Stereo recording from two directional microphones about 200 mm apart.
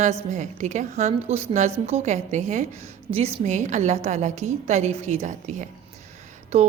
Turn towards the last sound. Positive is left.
turn(degrees=-30)  # may be behind; listen again after turning